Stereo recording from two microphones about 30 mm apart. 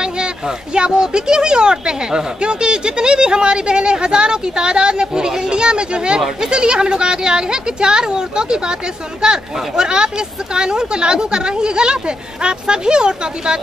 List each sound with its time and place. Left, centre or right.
0.0 s speech: right